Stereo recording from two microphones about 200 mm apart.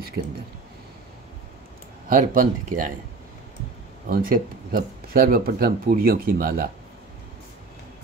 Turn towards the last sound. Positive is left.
turn(degrees=-50)  # may be behind; listen again after turning